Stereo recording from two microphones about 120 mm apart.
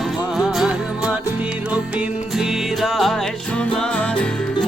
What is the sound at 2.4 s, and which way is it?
Music, centre (ahead or behind).